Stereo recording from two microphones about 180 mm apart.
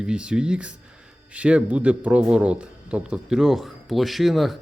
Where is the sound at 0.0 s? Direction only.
5° right (ahead or behind).